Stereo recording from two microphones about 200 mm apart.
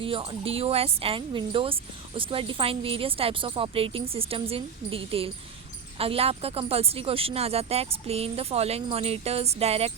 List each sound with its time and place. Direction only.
0.0 s speech: 25° right (ahead or behind)